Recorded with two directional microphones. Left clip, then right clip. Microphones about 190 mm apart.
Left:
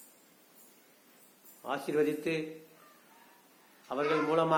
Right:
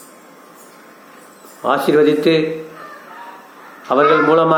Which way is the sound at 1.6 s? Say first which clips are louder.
Right 18 dB; 15° left (ahead or behind).